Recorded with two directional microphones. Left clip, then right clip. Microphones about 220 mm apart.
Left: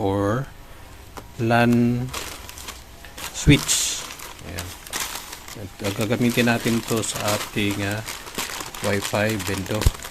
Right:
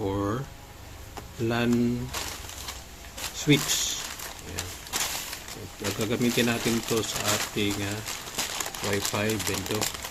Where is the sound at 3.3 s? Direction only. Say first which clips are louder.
Left 5 dB; 30° left (ahead or behind).